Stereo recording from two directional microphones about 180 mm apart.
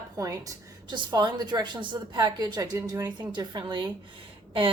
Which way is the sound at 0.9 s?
25° right (ahead or behind).